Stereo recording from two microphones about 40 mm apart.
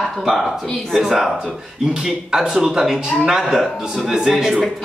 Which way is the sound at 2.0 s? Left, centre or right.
Centre.